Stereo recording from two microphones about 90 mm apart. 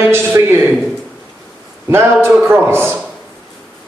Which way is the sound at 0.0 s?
30° right (ahead or behind).